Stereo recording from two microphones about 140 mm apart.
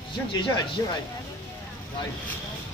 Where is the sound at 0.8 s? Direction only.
20° left (ahead or behind).